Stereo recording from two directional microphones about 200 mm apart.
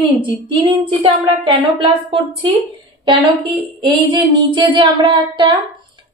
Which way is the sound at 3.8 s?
25° right (ahead or behind).